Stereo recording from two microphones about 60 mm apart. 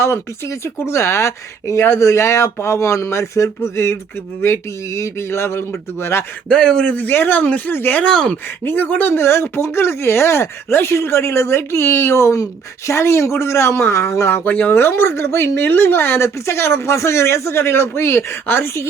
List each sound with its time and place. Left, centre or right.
0.0 s speech: left
6.5 s speech: centre
6.8 s a man's voice: left
7.7 s speech: left
8.0 s speech: centre
8.6 s a man's voice: left
9.0 s speech: left
14.4 s a man's voice: left
14.7 s speech: left